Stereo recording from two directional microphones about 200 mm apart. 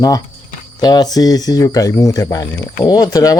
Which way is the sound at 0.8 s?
20° left (ahead or behind).